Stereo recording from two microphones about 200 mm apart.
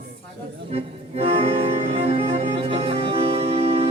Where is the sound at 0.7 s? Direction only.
30° right (ahead or behind).